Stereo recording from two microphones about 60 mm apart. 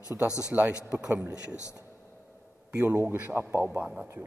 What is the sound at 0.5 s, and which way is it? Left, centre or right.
Speech, right.